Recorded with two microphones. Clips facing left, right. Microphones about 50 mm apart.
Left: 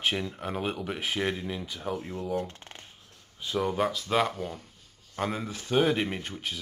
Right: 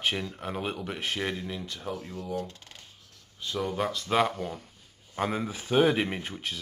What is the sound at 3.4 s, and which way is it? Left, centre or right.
Speech, centre.